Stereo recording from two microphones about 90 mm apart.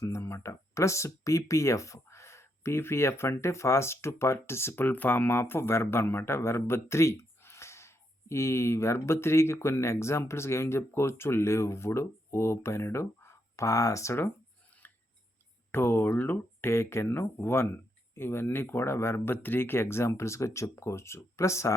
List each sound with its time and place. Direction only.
0.0 s speech: 30° left (ahead or behind)
15.7 s speech: 25° left (ahead or behind)